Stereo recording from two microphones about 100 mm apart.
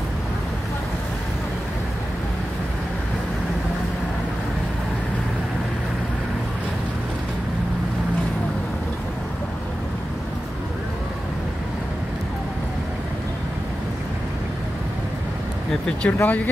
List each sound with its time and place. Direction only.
15.7 s speech: 10° left (ahead or behind)